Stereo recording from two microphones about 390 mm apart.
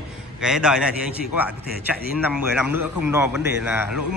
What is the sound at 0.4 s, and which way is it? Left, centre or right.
A man's voice, centre.